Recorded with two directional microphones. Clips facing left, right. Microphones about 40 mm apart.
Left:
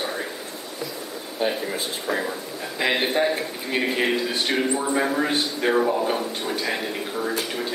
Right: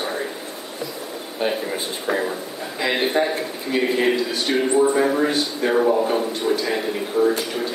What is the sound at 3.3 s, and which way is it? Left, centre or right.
A man's voice, centre.